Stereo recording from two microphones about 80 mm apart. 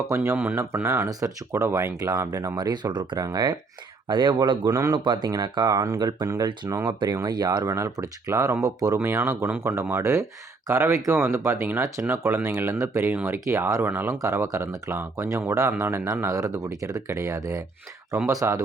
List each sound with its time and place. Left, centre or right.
0.1 s speech: right
0.3 s speech: centre
0.6 s speech: right
2.6 s speech: right
3.2 s speech: right
4.1 s speech: right
5.3 s speech: right
7.6 s speech: right
8.3 s speech: right
13.2 s speech: right
14.2 s speech: right
16.3 s speech: right